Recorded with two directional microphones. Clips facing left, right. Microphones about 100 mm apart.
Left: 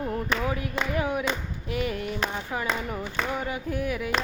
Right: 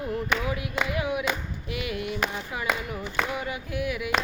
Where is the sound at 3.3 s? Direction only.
40° left (ahead or behind).